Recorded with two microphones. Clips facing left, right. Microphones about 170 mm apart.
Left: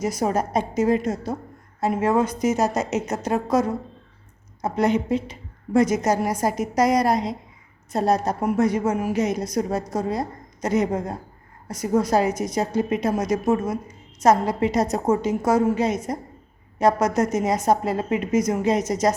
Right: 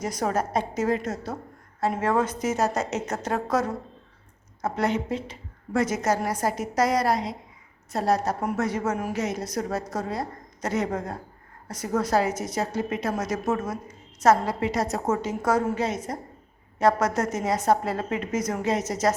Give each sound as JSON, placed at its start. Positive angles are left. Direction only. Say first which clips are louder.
{"t": 0.0, "sound": "a woman's voice", "louder": "left 3 dB", "side_deg": 10}